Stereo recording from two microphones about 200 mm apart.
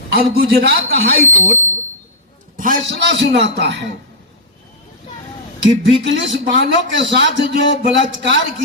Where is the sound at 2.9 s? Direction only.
60° right (ahead or behind).